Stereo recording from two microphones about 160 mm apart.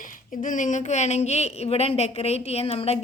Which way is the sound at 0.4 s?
55° left (ahead or behind).